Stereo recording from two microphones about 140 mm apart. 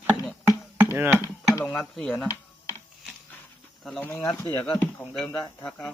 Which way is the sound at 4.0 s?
15° left (ahead or behind).